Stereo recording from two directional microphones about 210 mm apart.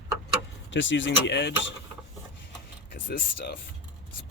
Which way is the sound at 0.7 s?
60° left (ahead or behind).